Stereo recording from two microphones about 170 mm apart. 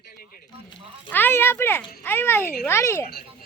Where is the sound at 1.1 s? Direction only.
10° left (ahead or behind).